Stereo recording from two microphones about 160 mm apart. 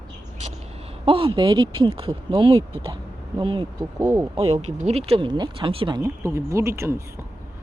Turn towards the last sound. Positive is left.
turn(degrees=-15)  # may be behind; listen again after turning